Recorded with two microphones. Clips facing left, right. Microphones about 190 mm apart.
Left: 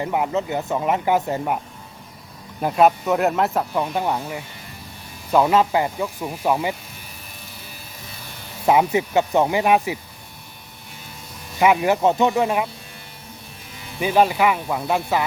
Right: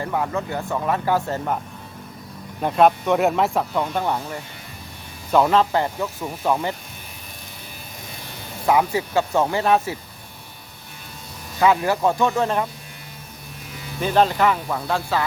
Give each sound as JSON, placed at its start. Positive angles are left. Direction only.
{"t": 0.0, "sound": "speech", "side_deg": 15}
{"t": 2.6, "sound": "speech", "side_deg": 5}
{"t": 8.6, "sound": "speech", "side_deg": 20}
{"t": 11.6, "sound": "speech", "side_deg": 15}
{"t": 14.0, "sound": "speech", "side_deg": 10}